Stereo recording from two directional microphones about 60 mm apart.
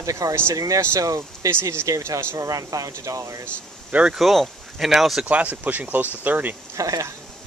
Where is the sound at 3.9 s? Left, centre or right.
Right.